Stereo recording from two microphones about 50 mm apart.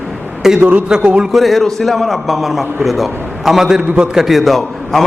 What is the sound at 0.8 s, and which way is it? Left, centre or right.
Speech, centre.